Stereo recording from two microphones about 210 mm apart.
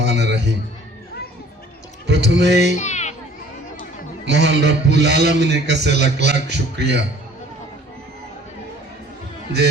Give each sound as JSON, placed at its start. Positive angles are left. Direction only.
{"t": 0.0, "sound": "music", "side_deg": -55}
{"t": 2.0, "sound": "a man's voice", "side_deg": -55}
{"t": 2.7, "sound": "children playing", "side_deg": 35}
{"t": 4.3, "sound": "a man's voice", "side_deg": -55}